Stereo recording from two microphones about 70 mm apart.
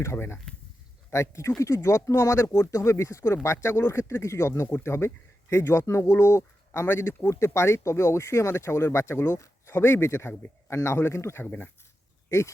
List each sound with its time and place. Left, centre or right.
0.0 s speech: left